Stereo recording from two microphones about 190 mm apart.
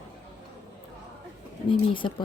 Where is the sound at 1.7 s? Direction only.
25° left (ahead or behind).